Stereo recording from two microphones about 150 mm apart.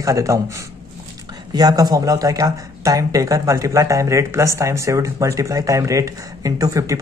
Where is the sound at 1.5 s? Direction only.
25° right (ahead or behind).